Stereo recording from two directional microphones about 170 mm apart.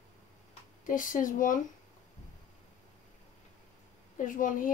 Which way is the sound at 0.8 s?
50° left (ahead or behind).